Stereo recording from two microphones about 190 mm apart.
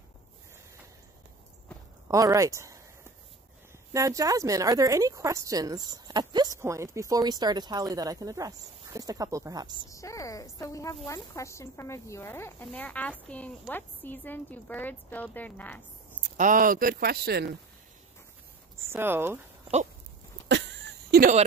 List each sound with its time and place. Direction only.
2.0 s speech: 20° right (ahead or behind)
3.9 s a woman's voice: 15° right (ahead or behind)
9.8 s a woman's voice: 15° left (ahead or behind)
16.3 s speech: 45° right (ahead or behind)
18.9 s a woman's voice: 10° right (ahead or behind)
20.4 s a sound: 65° right (ahead or behind)